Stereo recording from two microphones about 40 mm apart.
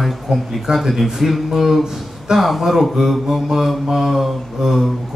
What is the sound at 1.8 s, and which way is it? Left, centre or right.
Speech, centre.